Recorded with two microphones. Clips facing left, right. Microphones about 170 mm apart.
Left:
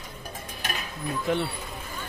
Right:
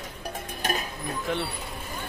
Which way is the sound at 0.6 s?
40° right (ahead or behind).